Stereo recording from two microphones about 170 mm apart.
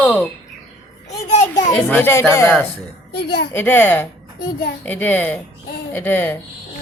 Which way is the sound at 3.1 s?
75° left (ahead or behind).